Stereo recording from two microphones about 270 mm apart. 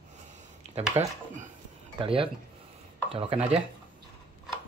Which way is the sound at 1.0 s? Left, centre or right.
Centre.